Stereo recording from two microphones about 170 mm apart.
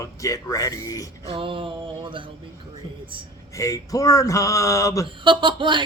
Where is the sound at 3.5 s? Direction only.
20° left (ahead or behind).